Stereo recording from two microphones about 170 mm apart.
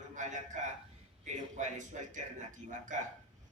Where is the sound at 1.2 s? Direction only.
45° right (ahead or behind).